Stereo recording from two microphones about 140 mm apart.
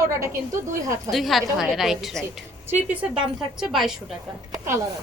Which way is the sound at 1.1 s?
Centre (ahead or behind).